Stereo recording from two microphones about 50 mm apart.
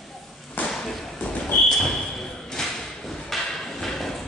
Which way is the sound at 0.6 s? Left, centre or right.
Left.